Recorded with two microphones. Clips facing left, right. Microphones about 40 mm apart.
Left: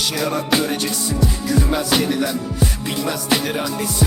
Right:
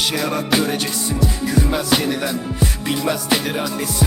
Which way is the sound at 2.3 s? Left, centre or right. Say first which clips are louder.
Even; right.